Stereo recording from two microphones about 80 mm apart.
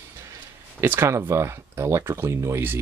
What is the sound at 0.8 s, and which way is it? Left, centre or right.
Speech, right.